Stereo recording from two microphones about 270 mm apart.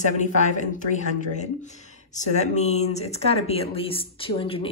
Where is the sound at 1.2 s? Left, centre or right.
Left.